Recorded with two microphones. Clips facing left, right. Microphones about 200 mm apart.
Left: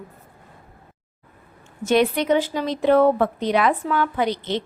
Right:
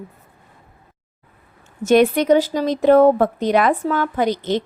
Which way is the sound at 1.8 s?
50° right (ahead or behind).